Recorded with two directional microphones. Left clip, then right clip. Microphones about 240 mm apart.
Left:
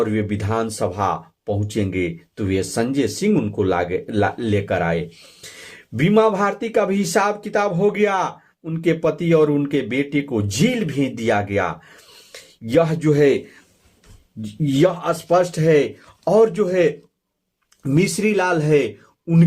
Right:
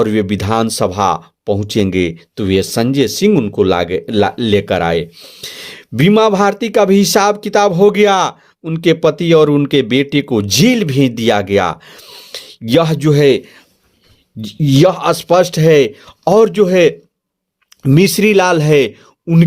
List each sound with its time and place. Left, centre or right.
0.0 s speech: right
14.6 s speech: right